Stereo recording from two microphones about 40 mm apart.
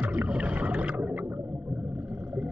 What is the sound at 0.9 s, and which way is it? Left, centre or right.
Whale vocalization, right.